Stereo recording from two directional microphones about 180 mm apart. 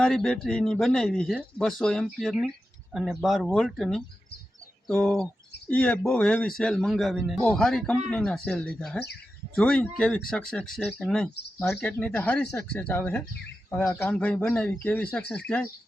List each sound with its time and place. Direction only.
0.0 s speech: centre (ahead or behind)